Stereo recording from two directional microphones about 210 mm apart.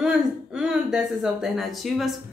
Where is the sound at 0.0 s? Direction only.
5° right (ahead or behind).